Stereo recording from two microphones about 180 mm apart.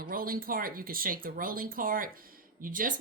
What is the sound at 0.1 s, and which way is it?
Speech, 55° right (ahead or behind).